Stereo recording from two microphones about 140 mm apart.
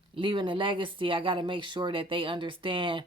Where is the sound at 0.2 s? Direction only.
35° right (ahead or behind).